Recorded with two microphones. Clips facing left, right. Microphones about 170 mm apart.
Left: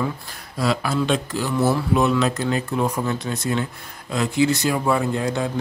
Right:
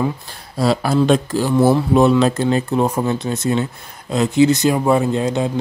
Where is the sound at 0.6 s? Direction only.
35° right (ahead or behind).